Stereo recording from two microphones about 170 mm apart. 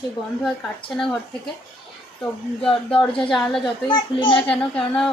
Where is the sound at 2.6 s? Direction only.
Centre (ahead or behind).